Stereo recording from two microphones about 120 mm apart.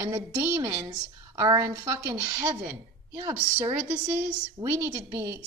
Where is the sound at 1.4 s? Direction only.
30° right (ahead or behind).